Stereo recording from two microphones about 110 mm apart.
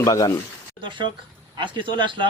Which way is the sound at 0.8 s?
50° right (ahead or behind).